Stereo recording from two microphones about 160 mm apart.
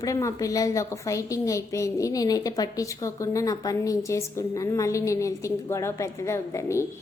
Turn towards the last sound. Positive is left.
turn(degrees=15)  # may be behind; listen again after turning